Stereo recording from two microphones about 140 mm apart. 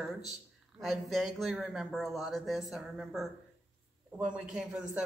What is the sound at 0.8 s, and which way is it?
A man's voice, centre (ahead or behind).